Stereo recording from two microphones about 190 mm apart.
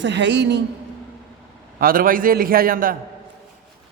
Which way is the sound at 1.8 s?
50° right (ahead or behind).